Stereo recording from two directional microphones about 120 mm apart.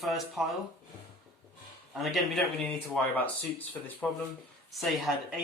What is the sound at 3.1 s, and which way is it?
Speech, 15° left (ahead or behind).